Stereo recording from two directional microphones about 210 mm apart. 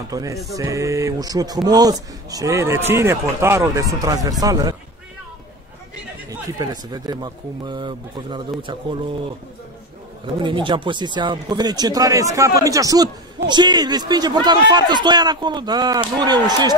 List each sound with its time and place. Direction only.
0.1 s a man's voice: 15° right (ahead or behind)
6.6 s speech: 20° right (ahead or behind)
10.2 s speech: 25° right (ahead or behind)